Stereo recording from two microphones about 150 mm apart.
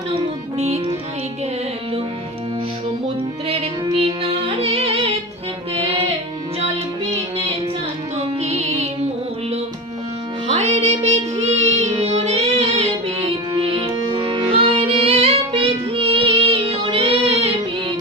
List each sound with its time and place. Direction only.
0.1 s music: 45° right (ahead or behind)
3.9 s music: 40° right (ahead or behind)
8.4 s music: 45° right (ahead or behind)
10.5 s music: 45° right (ahead or behind)